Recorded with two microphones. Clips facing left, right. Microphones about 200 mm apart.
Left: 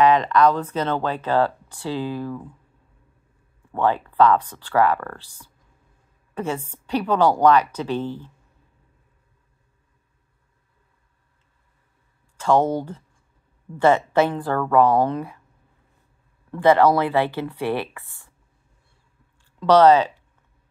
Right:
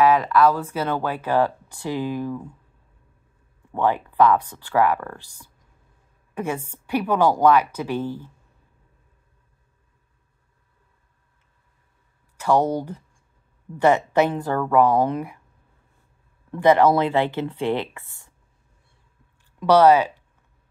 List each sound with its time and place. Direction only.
0.0 s speech: 5° right (ahead or behind)
3.7 s speech: 15° right (ahead or behind)
12.4 s speech: 15° right (ahead or behind)
16.5 s speech: 15° right (ahead or behind)
19.6 s speech: 10° right (ahead or behind)